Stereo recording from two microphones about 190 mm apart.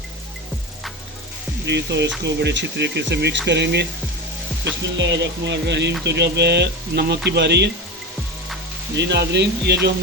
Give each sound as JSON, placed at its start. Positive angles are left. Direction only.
{"t": 1.6, "sound": "speech", "side_deg": -65}
{"t": 4.9, "sound": "speech", "side_deg": -70}
{"t": 9.0, "sound": "speech", "side_deg": -65}